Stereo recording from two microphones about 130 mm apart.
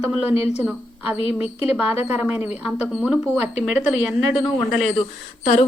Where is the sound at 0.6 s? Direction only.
10° right (ahead or behind).